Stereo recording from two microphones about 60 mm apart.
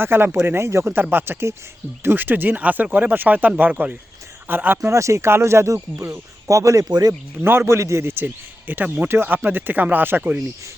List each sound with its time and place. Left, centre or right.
0.0 s speech: right
4.8 s speech: right
6.1 s speech: right
7.1 s speech: right
7.7 s speech: right